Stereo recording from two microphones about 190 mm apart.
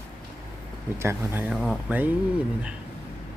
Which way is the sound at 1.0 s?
10° right (ahead or behind).